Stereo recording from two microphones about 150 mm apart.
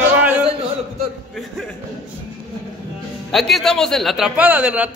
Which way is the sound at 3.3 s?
Centre (ahead or behind).